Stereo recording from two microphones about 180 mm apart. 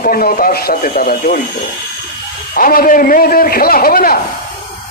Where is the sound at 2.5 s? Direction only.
55° left (ahead or behind).